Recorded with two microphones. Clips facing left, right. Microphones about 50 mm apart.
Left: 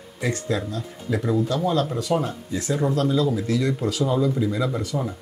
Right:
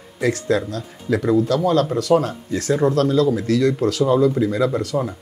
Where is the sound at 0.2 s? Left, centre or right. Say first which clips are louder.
Right 6 dB; right.